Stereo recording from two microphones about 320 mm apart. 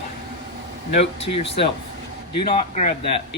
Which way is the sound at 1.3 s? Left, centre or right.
Centre.